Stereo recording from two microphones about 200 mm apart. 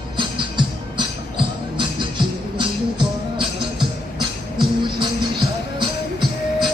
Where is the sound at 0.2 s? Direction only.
25° right (ahead or behind).